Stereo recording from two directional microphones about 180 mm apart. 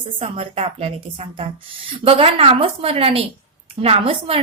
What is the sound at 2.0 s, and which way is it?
A woman's voice, 30° right (ahead or behind).